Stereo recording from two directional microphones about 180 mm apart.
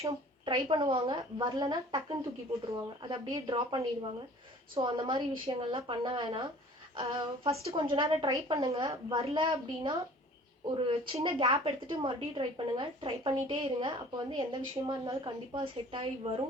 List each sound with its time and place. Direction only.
0.0 s a woman's voice: 25° right (ahead or behind)